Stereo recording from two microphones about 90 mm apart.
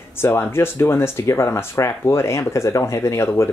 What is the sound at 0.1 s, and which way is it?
Speech, 25° left (ahead or behind).